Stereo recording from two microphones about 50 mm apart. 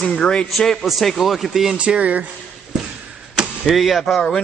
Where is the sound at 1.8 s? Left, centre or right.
Right.